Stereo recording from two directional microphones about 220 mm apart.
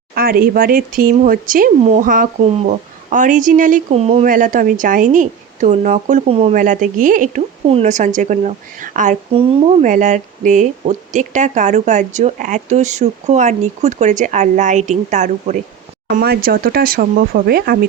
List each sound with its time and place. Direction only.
0.1 s speech: 40° right (ahead or behind)
16.0 s speech: 45° right (ahead or behind)